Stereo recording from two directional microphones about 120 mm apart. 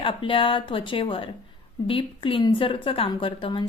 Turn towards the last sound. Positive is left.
turn(degrees=45)  # may be behind; listen again after turning